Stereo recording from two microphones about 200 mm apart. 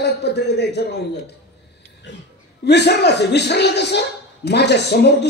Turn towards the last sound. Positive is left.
turn(degrees=55)  # may be behind; listen again after turning